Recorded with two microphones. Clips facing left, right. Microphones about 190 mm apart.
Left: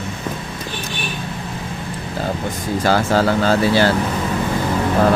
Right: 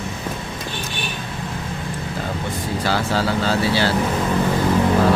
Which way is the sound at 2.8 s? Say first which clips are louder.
Left 6 dB; 50° left (ahead or behind).